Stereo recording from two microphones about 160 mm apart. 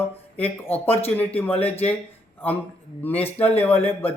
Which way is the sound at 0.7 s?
40° left (ahead or behind).